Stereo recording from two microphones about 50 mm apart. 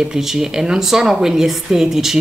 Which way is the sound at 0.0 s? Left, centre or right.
Centre.